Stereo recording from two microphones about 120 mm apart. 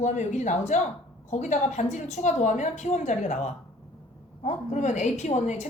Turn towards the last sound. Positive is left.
turn(degrees=75)  # may be behind; listen again after turning